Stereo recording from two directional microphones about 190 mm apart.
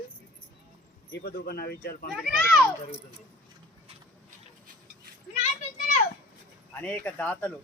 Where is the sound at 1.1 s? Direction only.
55° left (ahead or behind).